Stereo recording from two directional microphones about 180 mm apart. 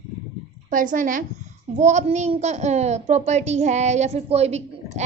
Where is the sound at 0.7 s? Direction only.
50° right (ahead or behind).